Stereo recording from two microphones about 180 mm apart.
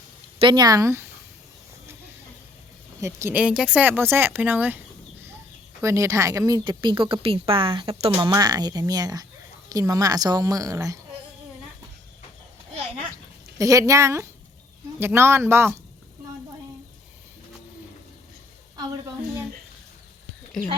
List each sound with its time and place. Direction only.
0.3 s a woman's voice: 25° right (ahead or behind)
3.0 s speech: 15° right (ahead or behind)
5.8 s a woman's voice: 15° right (ahead or behind)
13.6 s speech: 20° right (ahead or behind)